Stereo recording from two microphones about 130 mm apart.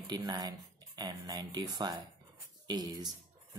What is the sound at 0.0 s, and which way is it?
Speech, 35° right (ahead or behind).